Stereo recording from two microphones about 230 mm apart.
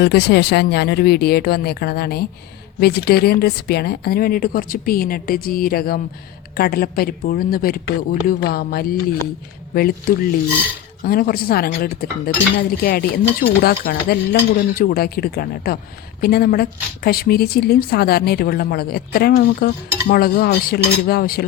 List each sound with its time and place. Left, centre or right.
0.0 s a woman's voice: left